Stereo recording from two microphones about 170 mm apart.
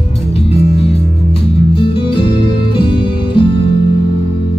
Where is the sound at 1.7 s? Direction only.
30° left (ahead or behind).